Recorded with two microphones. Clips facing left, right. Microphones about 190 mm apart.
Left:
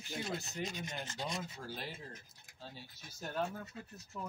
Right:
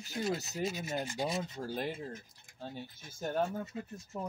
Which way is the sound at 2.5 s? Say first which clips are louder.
Right 8 dB; 55° right (ahead or behind).